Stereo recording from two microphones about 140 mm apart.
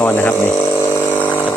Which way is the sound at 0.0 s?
15° left (ahead or behind).